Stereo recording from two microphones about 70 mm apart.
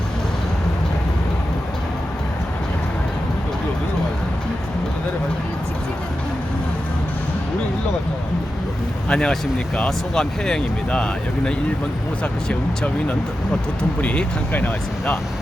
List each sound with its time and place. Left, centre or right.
9.0 s speech: centre